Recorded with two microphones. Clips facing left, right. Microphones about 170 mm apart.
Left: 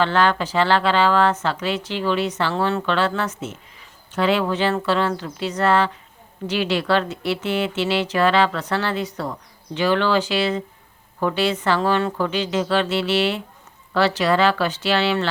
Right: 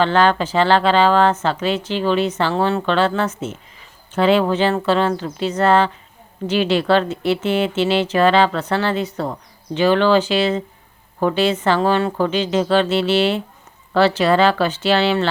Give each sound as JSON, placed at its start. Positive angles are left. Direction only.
{"t": 0.0, "sound": "speech", "side_deg": -25}
{"t": 12.3, "sound": "speech", "side_deg": -30}